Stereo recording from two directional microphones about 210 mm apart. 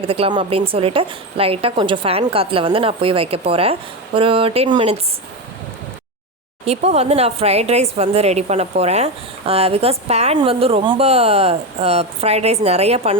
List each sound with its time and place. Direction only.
0.0 s a woman's voice: 25° right (ahead or behind)
6.7 s a woman's voice: 30° right (ahead or behind)